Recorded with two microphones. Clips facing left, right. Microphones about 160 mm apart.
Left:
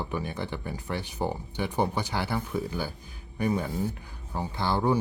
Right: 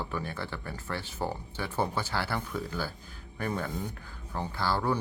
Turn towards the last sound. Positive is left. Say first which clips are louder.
# left 3 dB
turn(degrees=20)  # may be behind; listen again after turning